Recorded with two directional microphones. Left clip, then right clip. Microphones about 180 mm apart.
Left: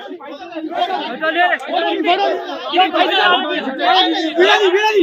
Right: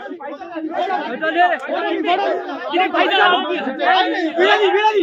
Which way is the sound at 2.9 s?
20° right (ahead or behind).